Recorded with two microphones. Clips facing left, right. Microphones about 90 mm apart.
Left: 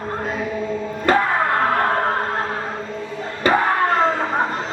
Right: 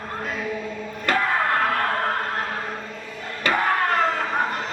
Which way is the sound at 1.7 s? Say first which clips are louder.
Left 4 dB; 25° left (ahead or behind).